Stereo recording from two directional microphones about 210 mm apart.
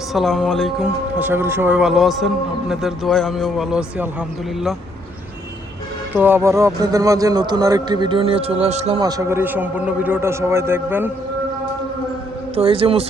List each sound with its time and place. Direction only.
0.1 s speech: centre (ahead or behind)
6.1 s a man's voice: 10° right (ahead or behind); by 9.0 s 30° right (ahead or behind)
9.0 s a man's voice: 20° right (ahead or behind)
12.5 s a man's voice: 25° right (ahead or behind)